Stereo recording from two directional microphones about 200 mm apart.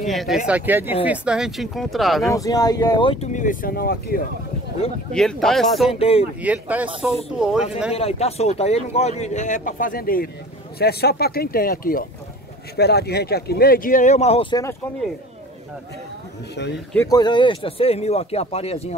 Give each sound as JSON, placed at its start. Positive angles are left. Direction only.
{"t": 0.0, "sound": "speech", "side_deg": 0}
{"t": 2.3, "sound": "speech", "side_deg": 20}
{"t": 5.1, "sound": "speech", "side_deg": 5}
{"t": 5.9, "sound": "speech", "side_deg": 30}
{"t": 6.4, "sound": "speech", "side_deg": -5}
{"t": 7.9, "sound": "speech", "side_deg": 30}
{"t": 16.9, "sound": "speech", "side_deg": 15}